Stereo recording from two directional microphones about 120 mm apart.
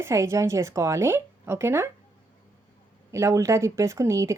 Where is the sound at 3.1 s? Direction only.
25° right (ahead or behind).